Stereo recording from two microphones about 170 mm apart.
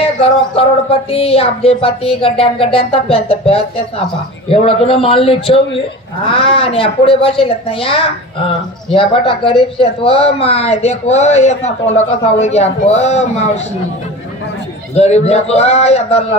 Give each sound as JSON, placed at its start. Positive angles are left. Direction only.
{"t": 0.6, "sound": "speech", "side_deg": 35}
{"t": 15.0, "sound": "speech", "side_deg": 40}